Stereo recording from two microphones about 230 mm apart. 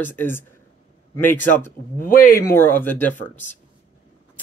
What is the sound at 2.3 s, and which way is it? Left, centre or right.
Speech, centre.